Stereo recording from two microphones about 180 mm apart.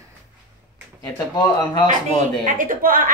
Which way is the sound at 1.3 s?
25° left (ahead or behind).